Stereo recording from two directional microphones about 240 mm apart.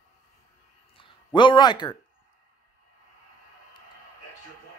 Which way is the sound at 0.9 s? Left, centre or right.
Centre.